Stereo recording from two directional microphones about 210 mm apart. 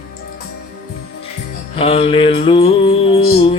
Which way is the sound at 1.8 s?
25° left (ahead or behind).